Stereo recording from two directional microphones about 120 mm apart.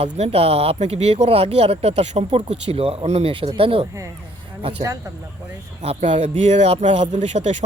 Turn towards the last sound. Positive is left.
turn(degrees=-70)  # may be behind; listen again after turning